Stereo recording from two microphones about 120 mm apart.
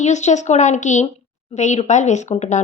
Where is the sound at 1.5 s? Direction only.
75° left (ahead or behind).